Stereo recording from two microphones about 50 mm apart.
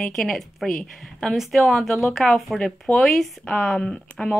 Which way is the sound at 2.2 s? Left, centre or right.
Left.